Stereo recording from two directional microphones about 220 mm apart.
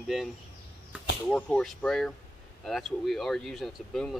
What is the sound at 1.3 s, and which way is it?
Speech, 5° left (ahead or behind).